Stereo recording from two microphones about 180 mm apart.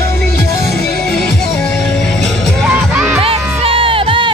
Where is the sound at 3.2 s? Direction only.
30° right (ahead or behind).